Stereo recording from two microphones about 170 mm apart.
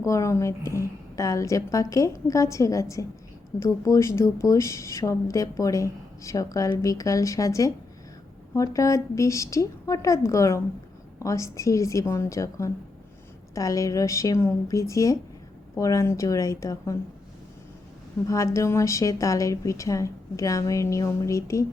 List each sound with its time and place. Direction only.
0.0 s a woman's voice: 15° left (ahead or behind)
18.3 s speech: 15° left (ahead or behind)